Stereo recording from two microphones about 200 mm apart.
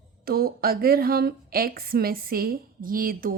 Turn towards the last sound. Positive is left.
turn(degrees=-45)  # may be behind; listen again after turning